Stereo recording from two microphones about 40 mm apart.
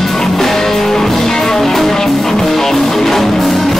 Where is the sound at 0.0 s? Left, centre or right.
Centre.